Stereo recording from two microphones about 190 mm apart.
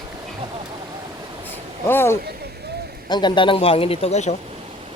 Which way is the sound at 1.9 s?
10° left (ahead or behind).